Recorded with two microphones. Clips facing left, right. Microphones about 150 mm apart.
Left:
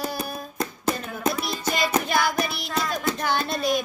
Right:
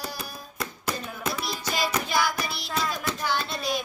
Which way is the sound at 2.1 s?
55° left (ahead or behind).